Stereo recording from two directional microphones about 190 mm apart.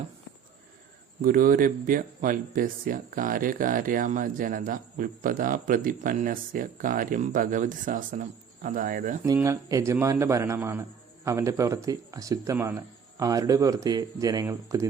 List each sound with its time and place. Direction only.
1.2 s speech: 45° right (ahead or behind)
9.2 s speech: 15° right (ahead or behind)